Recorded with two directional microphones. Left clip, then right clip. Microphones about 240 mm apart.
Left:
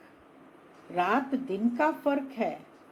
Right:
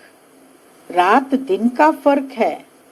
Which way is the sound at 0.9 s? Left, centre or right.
Right.